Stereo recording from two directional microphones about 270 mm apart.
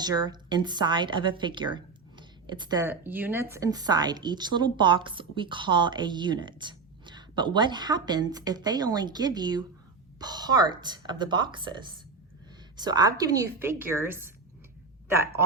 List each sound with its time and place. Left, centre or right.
0.0 s a woman's voice: centre